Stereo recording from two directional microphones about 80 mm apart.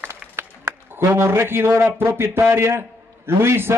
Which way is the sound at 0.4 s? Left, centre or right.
Right.